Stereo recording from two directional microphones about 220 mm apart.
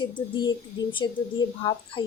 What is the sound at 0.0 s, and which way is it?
Speech, 20° left (ahead or behind).